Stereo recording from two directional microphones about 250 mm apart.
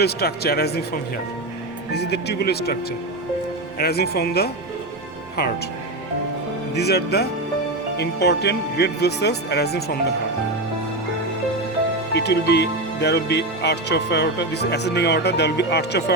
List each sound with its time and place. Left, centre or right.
0.0 s speech: left
1.9 s speech: left
3.8 s speech: left
6.7 s speech: left
12.1 s speech: left